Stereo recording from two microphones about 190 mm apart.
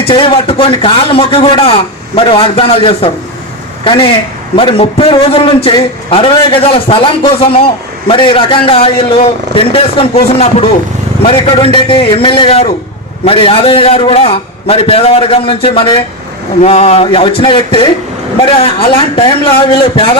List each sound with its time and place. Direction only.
0.1 s a man's voice: 30° left (ahead or behind)